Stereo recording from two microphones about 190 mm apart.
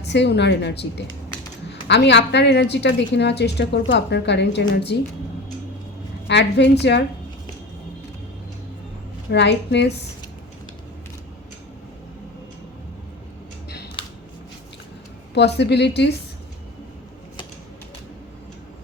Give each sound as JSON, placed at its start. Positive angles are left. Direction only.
{"t": 0.0, "sound": "a woman's voice", "side_deg": 65}
{"t": 6.2, "sound": "a woman's voice", "side_deg": 65}
{"t": 9.3, "sound": "a woman's voice", "side_deg": 65}
{"t": 15.4, "sound": "a woman's voice", "side_deg": 60}